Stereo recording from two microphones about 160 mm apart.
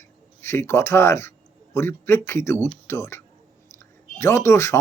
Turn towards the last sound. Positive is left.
turn(degrees=20)  # may be behind; listen again after turning